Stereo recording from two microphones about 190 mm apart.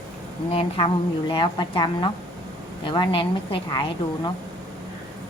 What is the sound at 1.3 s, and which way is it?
Speech, 25° left (ahead or behind).